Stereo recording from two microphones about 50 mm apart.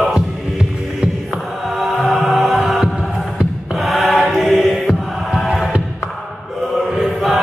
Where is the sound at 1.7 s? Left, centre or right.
Centre.